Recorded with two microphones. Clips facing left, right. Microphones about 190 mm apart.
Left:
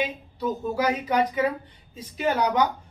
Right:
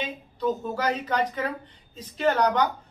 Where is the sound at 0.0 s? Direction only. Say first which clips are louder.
Even; 10° left (ahead or behind).